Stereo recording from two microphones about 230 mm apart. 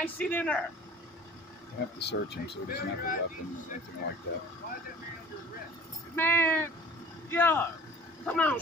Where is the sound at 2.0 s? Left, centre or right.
Left.